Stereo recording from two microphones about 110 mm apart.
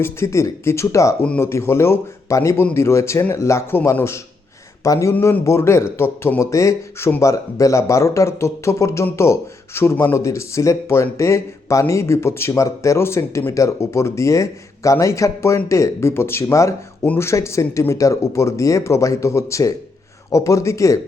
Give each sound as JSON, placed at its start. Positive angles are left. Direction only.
{"t": 0.0, "sound": "speech", "side_deg": 25}